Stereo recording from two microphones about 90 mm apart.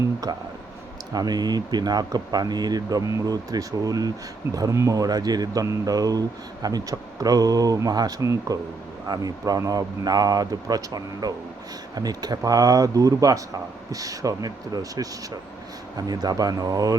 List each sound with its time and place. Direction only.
0.0 s speech: 45° right (ahead or behind)